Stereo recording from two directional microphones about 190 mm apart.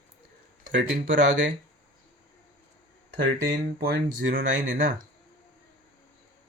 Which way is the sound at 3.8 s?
50° right (ahead or behind).